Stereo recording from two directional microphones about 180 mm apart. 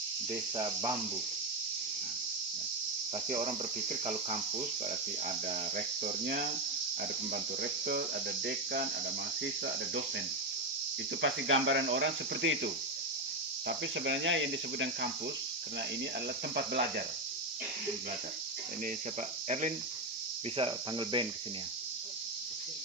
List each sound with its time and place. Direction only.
0.5 s cricket: 25° right (ahead or behind)
3.2 s cricket: 40° right (ahead or behind); by 8.0 s 55° right (ahead or behind)
11.2 s cricket: 90° right
16.6 s cricket: 60° right (ahead or behind)
20.6 s cricket: 30° right (ahead or behind)